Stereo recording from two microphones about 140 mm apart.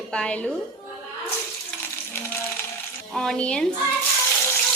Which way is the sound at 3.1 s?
5° left (ahead or behind).